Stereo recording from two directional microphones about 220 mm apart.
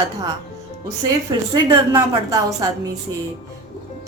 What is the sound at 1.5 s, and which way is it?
A woman's voice, 15° right (ahead or behind).